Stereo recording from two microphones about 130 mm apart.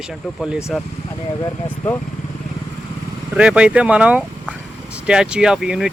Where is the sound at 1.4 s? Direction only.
20° left (ahead or behind).